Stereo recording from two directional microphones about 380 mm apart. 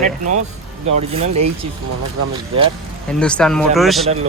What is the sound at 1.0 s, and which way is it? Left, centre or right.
Speech, centre.